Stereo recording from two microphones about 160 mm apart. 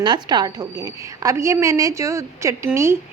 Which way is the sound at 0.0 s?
30° right (ahead or behind).